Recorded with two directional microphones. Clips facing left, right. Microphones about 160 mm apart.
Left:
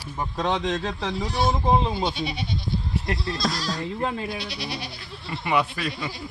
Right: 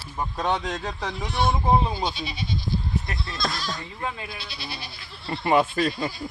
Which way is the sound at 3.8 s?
75° left (ahead or behind).